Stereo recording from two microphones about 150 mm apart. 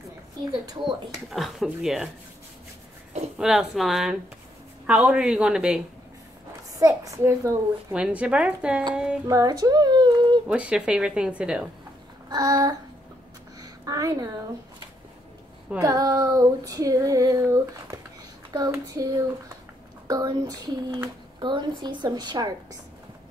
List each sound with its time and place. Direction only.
1.3 s speech: centre (ahead or behind)
3.3 s speech: centre (ahead or behind)
6.8 s speech: 20° right (ahead or behind)
7.9 s speech: 10° right (ahead or behind)
9.3 s speech: 25° right (ahead or behind)
10.5 s speech: 5° right (ahead or behind)
12.3 s speech: 25° right (ahead or behind)
13.6 s a sound: 25° right (ahead or behind)
15.8 s speech: 25° right (ahead or behind)